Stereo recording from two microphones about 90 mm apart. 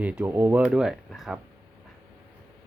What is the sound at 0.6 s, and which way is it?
Speech, 5° right (ahead or behind).